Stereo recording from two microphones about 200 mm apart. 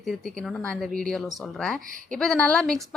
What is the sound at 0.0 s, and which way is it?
Speech, centre (ahead or behind).